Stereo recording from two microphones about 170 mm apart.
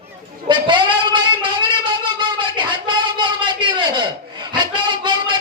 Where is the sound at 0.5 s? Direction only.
25° right (ahead or behind).